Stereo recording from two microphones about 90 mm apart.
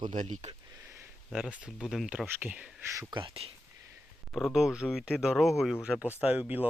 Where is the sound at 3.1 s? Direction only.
80° right.